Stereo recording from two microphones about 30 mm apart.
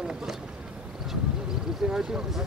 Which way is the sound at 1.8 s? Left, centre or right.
Right.